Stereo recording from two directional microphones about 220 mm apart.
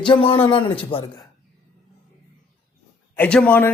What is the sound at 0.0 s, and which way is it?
Speech, 25° left (ahead or behind).